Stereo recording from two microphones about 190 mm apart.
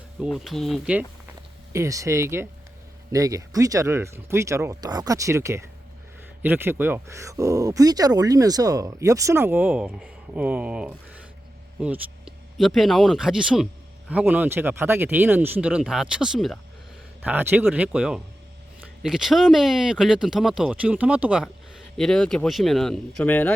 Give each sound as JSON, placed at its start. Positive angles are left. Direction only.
{"t": 0.2, "sound": "speech", "side_deg": 0}
{"t": 1.7, "sound": "speech", "side_deg": -15}